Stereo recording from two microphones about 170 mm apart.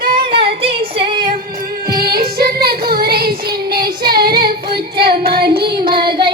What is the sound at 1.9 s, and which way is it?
Music, 65° right (ahead or behind).